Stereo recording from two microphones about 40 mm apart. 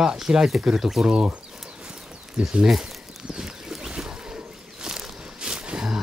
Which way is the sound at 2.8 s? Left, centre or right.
Centre.